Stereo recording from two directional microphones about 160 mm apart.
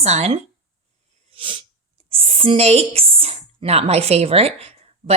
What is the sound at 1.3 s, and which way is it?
Sneeze, 35° right (ahead or behind).